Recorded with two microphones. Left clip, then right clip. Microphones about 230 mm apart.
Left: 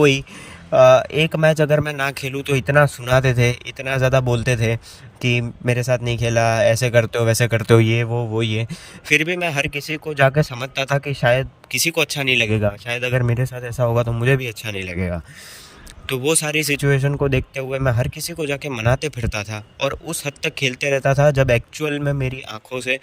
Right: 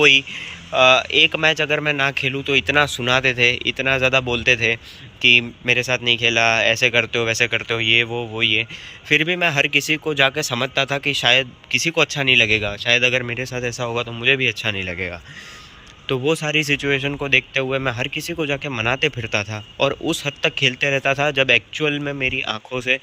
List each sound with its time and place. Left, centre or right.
0.0 s speech: left
1.8 s a man's voice: centre
2.4 s speech: left
16.6 s speech: left
19.4 s a man's voice: centre
20.1 s speech: left